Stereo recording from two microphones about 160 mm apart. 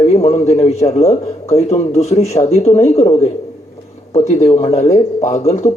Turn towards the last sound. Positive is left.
turn(degrees=45)  # may be behind; listen again after turning